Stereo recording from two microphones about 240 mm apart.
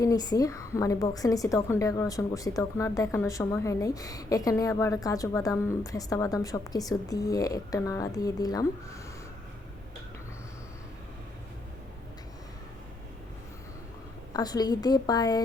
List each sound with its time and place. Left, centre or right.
0.0 s a woman's voice: centre
14.3 s a woman's voice: centre